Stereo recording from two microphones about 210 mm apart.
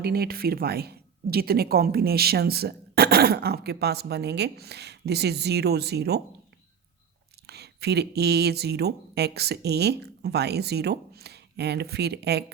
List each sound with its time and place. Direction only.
0.0 s speech: 45° right (ahead or behind)
7.4 s speech: 50° right (ahead or behind)